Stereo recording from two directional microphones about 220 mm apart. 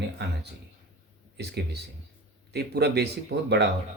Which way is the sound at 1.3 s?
50° right (ahead or behind).